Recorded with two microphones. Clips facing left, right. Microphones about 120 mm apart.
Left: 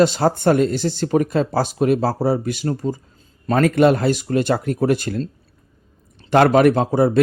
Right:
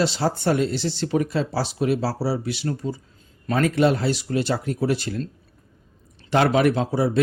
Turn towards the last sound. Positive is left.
turn(degrees=50)  # may be behind; listen again after turning